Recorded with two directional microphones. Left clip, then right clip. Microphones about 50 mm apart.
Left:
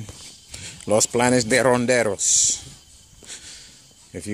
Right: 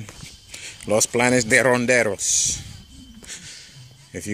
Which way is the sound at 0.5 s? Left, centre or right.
Left.